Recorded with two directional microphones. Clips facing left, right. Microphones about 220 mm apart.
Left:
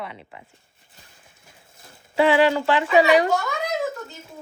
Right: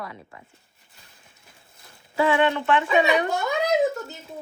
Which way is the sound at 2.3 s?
90° left.